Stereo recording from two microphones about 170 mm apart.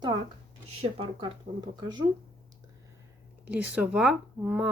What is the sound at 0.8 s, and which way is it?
Speech, 30° right (ahead or behind).